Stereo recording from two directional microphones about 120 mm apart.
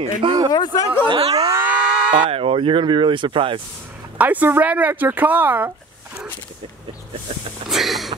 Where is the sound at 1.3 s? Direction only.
25° right (ahead or behind).